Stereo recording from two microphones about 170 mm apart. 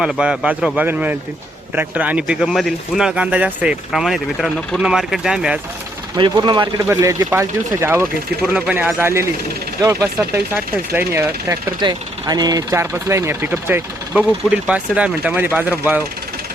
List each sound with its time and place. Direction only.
0.0 s speech: 5° right (ahead or behind)
6.1 s speech: 25° right (ahead or behind); by 16.0 s 10° right (ahead or behind)